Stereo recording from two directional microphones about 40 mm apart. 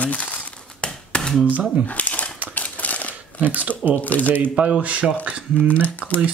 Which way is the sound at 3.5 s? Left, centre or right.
Right.